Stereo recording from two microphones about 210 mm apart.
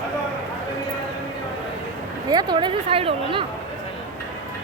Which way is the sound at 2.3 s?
20° right (ahead or behind).